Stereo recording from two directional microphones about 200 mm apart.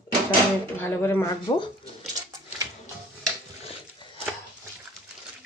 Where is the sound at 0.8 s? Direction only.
10° left (ahead or behind).